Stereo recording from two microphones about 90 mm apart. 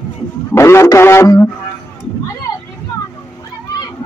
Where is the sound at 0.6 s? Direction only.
30° left (ahead or behind).